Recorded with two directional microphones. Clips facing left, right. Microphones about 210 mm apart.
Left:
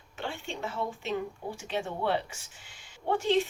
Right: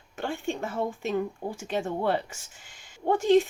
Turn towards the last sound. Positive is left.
turn(degrees=-45)  # may be behind; listen again after turning